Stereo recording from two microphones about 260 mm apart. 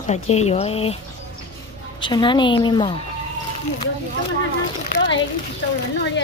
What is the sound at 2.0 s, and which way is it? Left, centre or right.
A woman's voice, centre.